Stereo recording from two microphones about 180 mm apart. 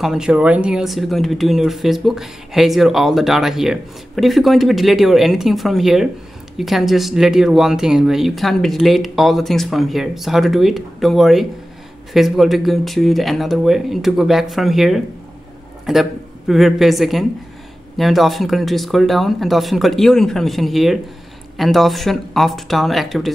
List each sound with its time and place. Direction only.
0.0 s a woman's voice: 5° right (ahead or behind)